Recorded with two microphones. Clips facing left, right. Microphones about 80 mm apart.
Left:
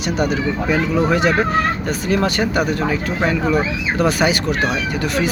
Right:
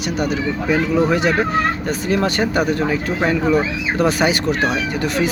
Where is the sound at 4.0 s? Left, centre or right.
Right.